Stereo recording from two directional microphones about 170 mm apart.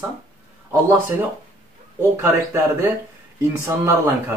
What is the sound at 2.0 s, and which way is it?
Speech, 15° right (ahead or behind).